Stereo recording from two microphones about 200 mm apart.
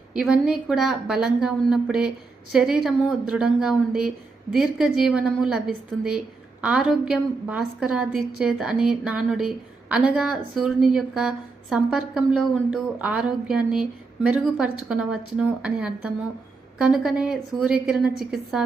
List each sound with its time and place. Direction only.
0.1 s a woman's voice: 5° right (ahead or behind)